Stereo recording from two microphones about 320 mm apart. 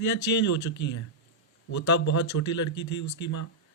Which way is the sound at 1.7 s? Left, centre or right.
Left.